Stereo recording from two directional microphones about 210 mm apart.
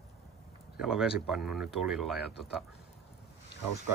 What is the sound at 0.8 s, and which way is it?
Speech, 5° right (ahead or behind).